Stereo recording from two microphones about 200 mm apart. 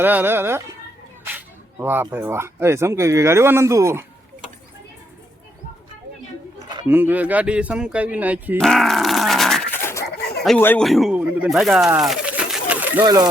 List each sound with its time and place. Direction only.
0.0 s speech: 10° right (ahead or behind)
1.2 s a sound: 10° right (ahead or behind)
2.0 s speech: 10° right (ahead or behind)
6.8 s speech: 10° right (ahead or behind)
8.6 s dog: centre (ahead or behind)
10.4 s speech: 5° left (ahead or behind)
12.0 s bird: 5° right (ahead or behind)